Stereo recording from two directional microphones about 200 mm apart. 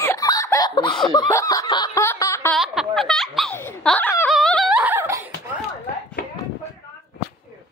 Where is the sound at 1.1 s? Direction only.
20° left (ahead or behind).